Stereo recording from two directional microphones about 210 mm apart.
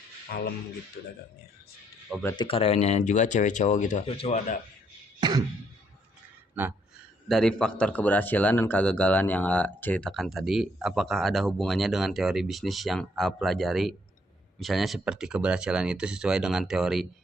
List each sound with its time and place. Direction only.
0.3 s speech: 45° left (ahead or behind)
2.2 s speech: 20° left (ahead or behind)
5.2 s a sound: 20° right (ahead or behind)
7.3 s a man's voice: 5° left (ahead or behind)